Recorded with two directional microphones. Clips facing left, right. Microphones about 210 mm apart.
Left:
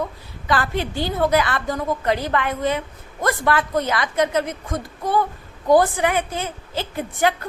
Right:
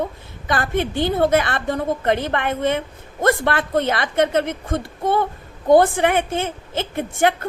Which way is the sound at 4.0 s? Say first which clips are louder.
Right 2 dB; 55° right (ahead or behind).